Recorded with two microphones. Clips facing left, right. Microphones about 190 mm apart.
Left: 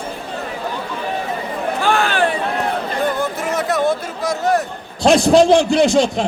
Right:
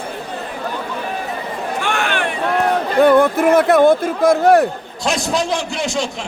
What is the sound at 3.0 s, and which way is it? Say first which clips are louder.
A man's voice: right 11 dB; 60° right (ahead or behind).